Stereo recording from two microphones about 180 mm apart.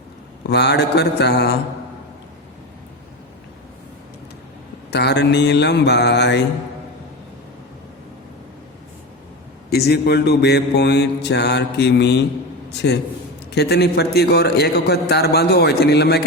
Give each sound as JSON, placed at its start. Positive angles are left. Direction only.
{"t": 0.4, "sound": "mantra", "side_deg": 65}
{"t": 4.9, "sound": "mantra", "side_deg": 65}
{"t": 9.6, "sound": "mantra", "side_deg": 60}
{"t": 13.5, "sound": "a man's voice", "side_deg": 65}